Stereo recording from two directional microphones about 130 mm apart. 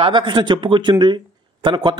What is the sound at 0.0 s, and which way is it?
A man's voice, 35° right (ahead or behind).